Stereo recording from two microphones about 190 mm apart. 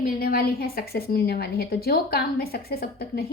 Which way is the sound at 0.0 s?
50° left (ahead or behind).